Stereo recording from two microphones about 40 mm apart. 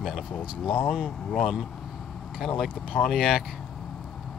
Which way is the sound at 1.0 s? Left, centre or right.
Centre.